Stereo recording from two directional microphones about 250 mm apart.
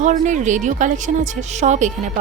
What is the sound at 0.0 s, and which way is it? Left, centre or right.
A woman's voice, right.